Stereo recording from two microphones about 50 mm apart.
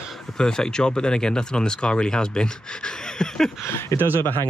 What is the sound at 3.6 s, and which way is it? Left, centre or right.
Speech, left.